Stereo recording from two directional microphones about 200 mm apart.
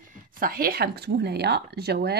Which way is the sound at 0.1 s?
45° right (ahead or behind).